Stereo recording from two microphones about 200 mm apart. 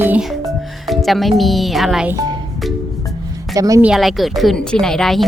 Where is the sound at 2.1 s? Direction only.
20° right (ahead or behind).